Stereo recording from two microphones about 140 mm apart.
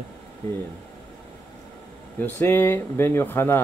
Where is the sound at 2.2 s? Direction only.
15° left (ahead or behind).